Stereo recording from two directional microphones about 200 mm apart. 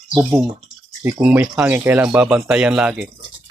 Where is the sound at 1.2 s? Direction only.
5° right (ahead or behind).